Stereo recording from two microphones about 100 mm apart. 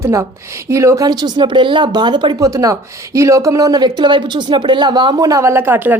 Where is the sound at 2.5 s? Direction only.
35° right (ahead or behind).